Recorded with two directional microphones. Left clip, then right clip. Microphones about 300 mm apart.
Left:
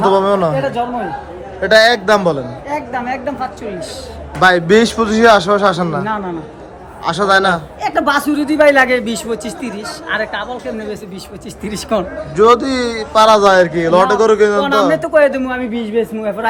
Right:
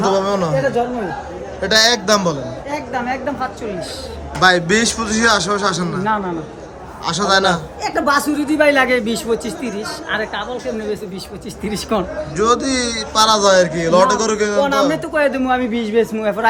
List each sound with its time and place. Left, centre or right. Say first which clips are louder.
0.0 s a sound: left 5 dB; centre
1.6 s a man's voice: left 4 dB; centre
7.8 s a woman's voice: left 2 dB; centre